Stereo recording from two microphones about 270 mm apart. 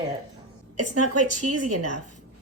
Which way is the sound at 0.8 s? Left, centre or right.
Right.